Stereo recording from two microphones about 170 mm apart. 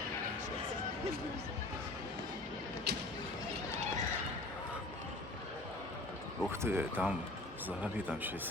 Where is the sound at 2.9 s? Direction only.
75° right (ahead or behind).